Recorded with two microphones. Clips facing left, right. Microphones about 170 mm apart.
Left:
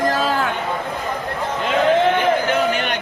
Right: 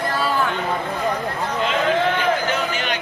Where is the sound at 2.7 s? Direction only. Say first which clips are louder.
Left 3 dB; 55° left (ahead or behind).